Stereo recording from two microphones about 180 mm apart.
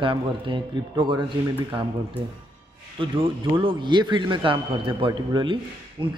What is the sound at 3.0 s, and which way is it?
A man's voice, 30° right (ahead or behind).